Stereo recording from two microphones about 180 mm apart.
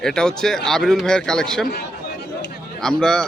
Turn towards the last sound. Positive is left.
turn(degrees=5)  # may be behind; listen again after turning